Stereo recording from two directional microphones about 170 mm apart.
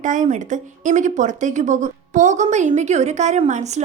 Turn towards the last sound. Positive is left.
turn(degrees=-45)  # may be behind; listen again after turning